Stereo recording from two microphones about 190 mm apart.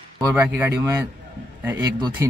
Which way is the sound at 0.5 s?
10° right (ahead or behind).